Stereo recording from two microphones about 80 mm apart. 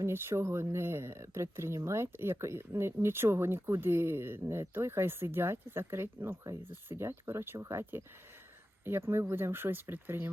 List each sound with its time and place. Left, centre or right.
0.0 s speech: right